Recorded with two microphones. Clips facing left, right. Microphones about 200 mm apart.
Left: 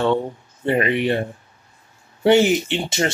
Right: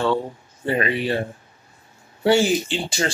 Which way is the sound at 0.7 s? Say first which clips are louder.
Left 3 dB; 20° left (ahead or behind).